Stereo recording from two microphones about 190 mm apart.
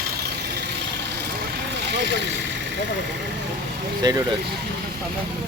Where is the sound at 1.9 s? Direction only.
65° right (ahead or behind).